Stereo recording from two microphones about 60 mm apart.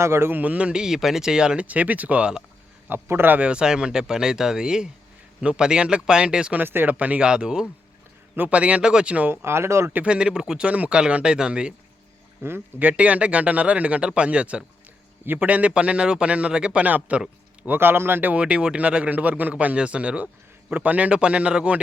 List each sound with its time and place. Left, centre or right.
0.0 s speech: right
0.3 s speech: right
1.6 s a man's voice: right
2.9 s speech: right
3.4 s speech: centre
6.6 s a man's voice: right
9.3 s speech: right
9.9 s speech: right
12.4 s speech: right
12.8 s a man's voice: right
17.7 s a man's voice: right; by 21.8 s centre